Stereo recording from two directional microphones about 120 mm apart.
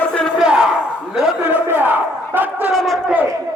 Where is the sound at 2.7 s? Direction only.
Centre (ahead or behind).